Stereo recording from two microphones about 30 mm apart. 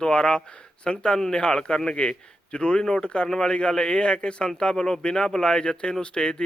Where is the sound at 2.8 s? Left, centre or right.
Left.